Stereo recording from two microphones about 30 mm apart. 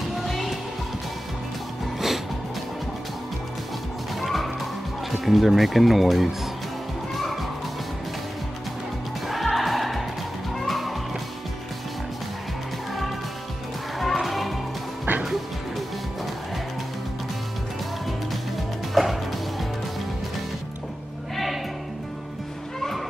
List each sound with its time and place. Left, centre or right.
0.2 s music: centre
4.2 s music: centre
5.2 s speech: centre
9.3 s music: centre
10.5 s music: centre
13.9 s music: centre
15.1 s music: right
19.0 s music: centre